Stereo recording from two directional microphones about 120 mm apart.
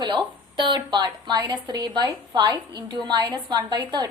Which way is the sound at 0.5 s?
40° right (ahead or behind).